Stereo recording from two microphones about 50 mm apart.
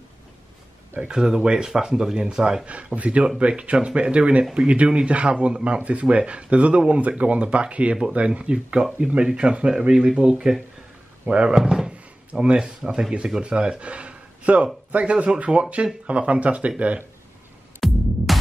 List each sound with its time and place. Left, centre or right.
1.0 s speech: centre
17.7 s music: centre